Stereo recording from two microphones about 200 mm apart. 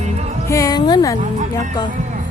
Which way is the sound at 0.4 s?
15° left (ahead or behind).